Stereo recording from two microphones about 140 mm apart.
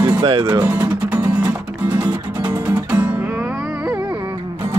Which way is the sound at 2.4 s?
10° right (ahead or behind).